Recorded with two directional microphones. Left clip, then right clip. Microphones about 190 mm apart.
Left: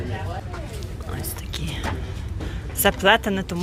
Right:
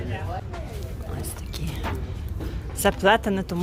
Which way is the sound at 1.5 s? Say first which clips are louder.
Left 5 dB; centre (ahead or behind).